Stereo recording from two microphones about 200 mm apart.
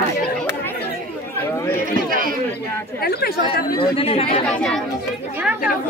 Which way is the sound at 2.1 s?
45° right (ahead or behind).